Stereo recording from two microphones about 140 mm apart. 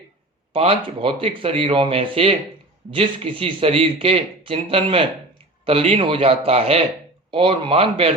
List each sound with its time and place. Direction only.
0.5 s a man's voice: 40° right (ahead or behind)